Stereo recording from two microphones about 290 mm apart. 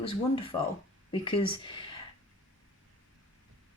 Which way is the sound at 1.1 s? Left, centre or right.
Centre.